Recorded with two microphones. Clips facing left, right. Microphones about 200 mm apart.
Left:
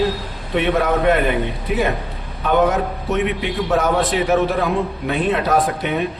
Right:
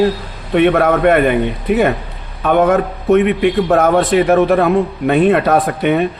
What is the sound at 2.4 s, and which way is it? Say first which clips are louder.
A man's voice: right 5 dB; 55° right (ahead or behind).